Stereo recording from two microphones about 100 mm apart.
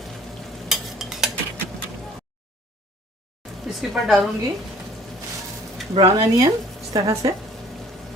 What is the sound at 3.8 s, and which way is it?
Speech, centre (ahead or behind).